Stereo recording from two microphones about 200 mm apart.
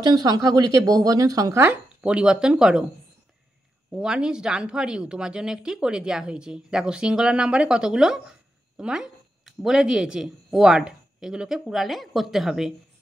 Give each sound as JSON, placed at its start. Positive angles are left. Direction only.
{"t": 0.0, "sound": "speech", "side_deg": -20}
{"t": 3.9, "sound": "speech", "side_deg": -5}